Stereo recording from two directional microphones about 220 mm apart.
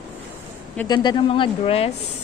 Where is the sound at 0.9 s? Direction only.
20° left (ahead or behind).